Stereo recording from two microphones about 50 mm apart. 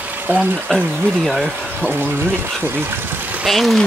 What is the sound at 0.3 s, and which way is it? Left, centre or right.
Speech, right.